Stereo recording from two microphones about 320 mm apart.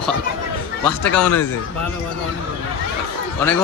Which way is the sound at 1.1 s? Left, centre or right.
Centre.